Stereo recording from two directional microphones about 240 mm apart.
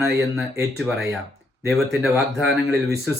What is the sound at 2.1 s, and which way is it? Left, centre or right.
Speech, centre.